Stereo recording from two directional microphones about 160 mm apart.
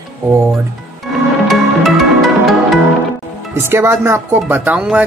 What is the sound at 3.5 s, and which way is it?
Speech, 15° right (ahead or behind).